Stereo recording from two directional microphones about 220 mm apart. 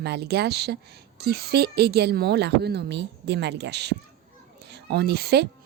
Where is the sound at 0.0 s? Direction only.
50° right (ahead or behind).